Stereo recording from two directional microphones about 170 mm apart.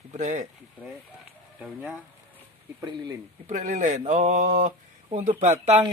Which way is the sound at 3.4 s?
45° right (ahead or behind).